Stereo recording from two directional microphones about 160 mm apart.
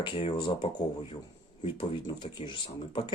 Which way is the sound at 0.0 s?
35° left (ahead or behind).